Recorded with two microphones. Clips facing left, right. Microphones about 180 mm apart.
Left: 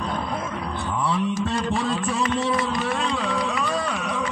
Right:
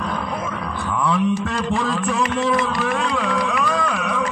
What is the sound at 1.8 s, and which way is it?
Music, 70° right (ahead or behind).